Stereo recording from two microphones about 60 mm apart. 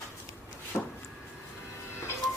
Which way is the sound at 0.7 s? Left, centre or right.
Left.